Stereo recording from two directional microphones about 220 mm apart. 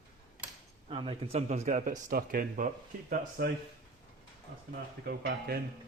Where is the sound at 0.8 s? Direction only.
25° right (ahead or behind); by 3.5 s 40° right (ahead or behind).